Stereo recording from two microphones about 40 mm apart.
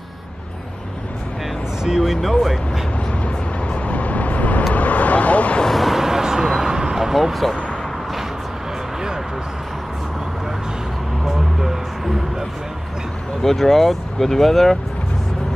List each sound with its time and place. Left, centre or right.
1.9 s speech: centre
3.3 s vehicle: left
5.7 s a sound: centre
11.2 s vehicle: centre
13.4 s speech: centre